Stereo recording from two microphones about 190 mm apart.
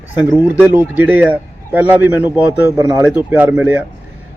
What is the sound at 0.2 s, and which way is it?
A man's voice, 10° right (ahead or behind).